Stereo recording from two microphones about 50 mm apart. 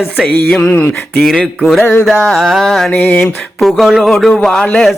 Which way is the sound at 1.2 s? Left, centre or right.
Centre.